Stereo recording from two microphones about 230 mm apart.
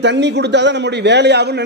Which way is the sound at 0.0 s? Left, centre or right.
Right.